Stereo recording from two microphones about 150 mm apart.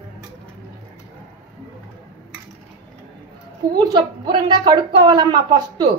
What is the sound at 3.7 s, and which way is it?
Speech, 25° right (ahead or behind).